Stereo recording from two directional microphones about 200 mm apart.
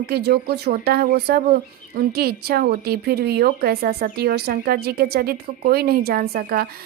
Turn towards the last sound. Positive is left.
turn(degrees=-50)  # may be behind; listen again after turning